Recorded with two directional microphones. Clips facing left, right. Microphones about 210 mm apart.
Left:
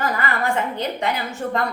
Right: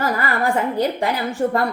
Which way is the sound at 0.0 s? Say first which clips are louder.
Right 2 dB; 35° right (ahead or behind).